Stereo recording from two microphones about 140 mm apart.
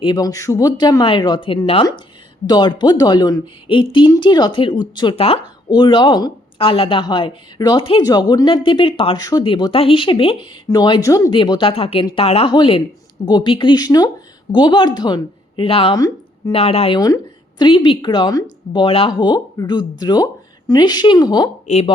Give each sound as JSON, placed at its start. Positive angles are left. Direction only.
{"t": 0.0, "sound": "speech", "side_deg": 30}
{"t": 11.3, "sound": "speech", "side_deg": 35}
{"t": 21.7, "sound": "speech", "side_deg": 50}